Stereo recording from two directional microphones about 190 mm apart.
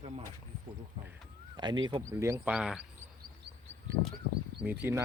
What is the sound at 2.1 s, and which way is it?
Speech, 15° right (ahead or behind).